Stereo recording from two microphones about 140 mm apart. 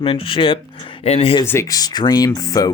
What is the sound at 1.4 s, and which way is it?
Speech, 20° left (ahead or behind).